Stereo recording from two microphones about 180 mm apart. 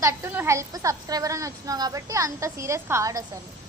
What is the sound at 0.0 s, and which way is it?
A woman's voice, 15° right (ahead or behind).